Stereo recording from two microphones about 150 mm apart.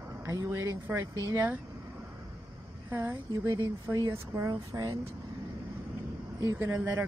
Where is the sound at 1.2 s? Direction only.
15° right (ahead or behind).